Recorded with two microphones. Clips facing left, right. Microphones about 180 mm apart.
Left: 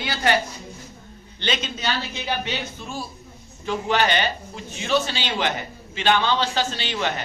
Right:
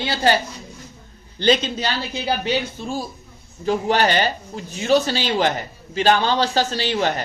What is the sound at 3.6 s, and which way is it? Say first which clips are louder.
A man's voice: right 4 dB; 40° right (ahead or behind).